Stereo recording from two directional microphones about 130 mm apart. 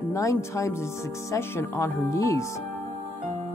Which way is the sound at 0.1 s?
25° left (ahead or behind).